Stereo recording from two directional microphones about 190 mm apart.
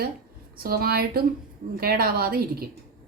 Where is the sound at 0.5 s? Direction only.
50° right (ahead or behind).